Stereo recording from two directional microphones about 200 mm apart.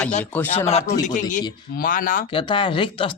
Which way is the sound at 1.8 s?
45° left (ahead or behind).